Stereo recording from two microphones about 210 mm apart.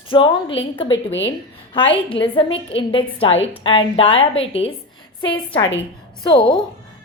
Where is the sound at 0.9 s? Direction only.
60° left (ahead or behind).